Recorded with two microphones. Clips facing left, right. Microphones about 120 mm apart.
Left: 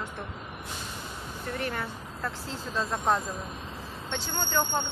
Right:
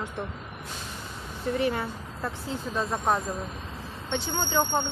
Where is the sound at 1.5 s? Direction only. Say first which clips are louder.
Right 6 dB; 20° right (ahead or behind).